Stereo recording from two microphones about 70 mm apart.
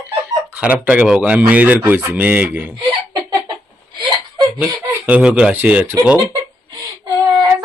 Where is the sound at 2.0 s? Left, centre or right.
Right.